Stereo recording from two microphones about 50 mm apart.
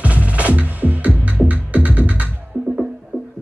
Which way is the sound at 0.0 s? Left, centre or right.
Right.